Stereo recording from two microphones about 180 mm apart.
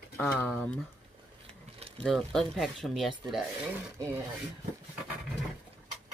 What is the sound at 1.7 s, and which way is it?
Mechanisms, 35° right (ahead or behind).